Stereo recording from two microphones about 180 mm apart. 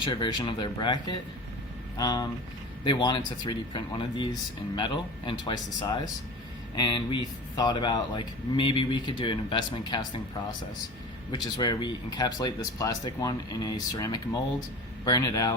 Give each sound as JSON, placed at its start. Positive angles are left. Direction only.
{"t": 0.0, "sound": "speech", "side_deg": 25}
{"t": 11.5, "sound": "speech", "side_deg": 20}